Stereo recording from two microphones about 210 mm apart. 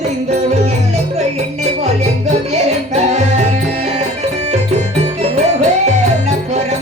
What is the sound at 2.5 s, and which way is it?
Music, 30° right (ahead or behind).